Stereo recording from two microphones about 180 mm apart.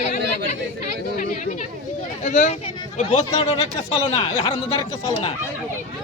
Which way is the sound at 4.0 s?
30° left (ahead or behind).